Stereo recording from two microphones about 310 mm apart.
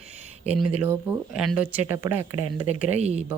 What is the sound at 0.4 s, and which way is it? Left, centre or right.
Speech, centre.